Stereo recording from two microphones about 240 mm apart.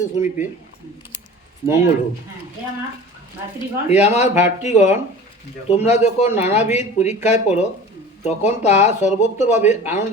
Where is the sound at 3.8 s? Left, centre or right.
Left.